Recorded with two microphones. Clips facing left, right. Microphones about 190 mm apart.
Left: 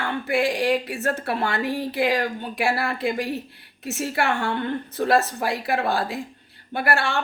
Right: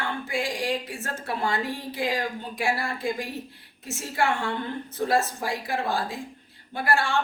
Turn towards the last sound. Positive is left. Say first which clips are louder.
# left 1 dB
turn(degrees=65)  # may be behind; listen again after turning